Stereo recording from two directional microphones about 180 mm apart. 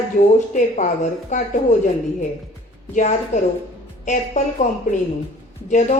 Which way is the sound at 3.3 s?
40° left (ahead or behind).